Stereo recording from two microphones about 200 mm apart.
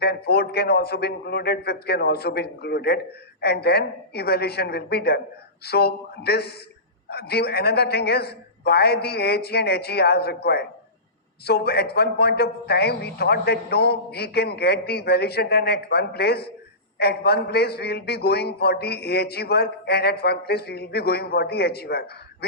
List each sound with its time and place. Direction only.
0.0 s a man's voice: 50° left (ahead or behind)